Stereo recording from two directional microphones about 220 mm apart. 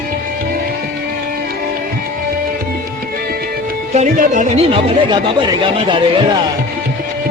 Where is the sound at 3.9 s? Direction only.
35° right (ahead or behind).